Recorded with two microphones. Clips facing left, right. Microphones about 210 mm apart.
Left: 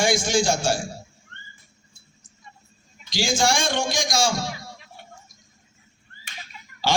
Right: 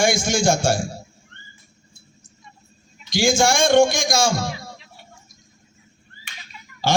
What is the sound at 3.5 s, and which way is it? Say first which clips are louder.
A man's voice: right 9 dB; 45° right (ahead or behind).